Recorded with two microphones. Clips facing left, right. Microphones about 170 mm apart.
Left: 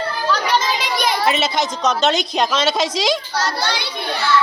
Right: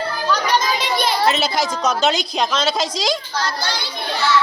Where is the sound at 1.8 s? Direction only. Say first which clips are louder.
Left 2 dB; centre (ahead or behind).